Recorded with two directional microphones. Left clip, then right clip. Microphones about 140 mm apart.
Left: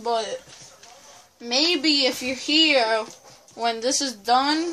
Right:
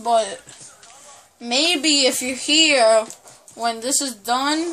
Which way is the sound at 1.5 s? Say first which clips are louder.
Right 3 dB; 50° right (ahead or behind).